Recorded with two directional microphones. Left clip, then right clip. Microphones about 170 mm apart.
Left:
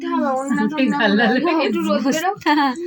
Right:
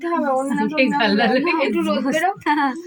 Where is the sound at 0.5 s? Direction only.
15° right (ahead or behind).